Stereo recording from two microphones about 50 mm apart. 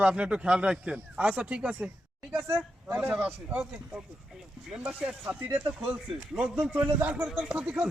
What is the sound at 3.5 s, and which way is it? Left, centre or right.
Speech, centre.